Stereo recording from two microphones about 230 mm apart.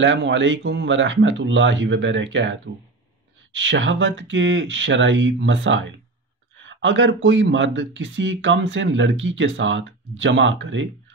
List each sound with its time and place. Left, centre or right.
0.0 s speech: right